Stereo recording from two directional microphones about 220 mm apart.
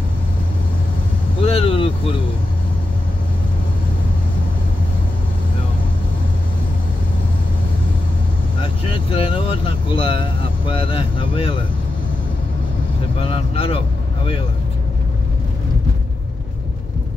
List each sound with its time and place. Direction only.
1.4 s vehicle: 25° left (ahead or behind)
8.9 s vehicle: 25° left (ahead or behind)
13.2 s a man's voice: 25° left (ahead or behind)